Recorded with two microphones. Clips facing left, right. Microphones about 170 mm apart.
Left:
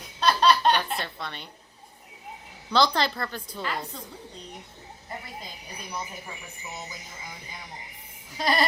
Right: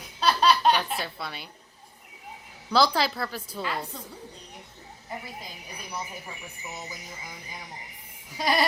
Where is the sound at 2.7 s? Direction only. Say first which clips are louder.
Even; 5° right (ahead or behind).